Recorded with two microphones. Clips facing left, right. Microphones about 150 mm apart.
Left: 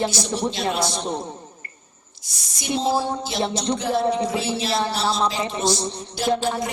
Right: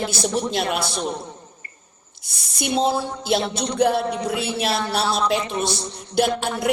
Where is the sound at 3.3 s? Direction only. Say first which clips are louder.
Right 4 dB; 60° right (ahead or behind).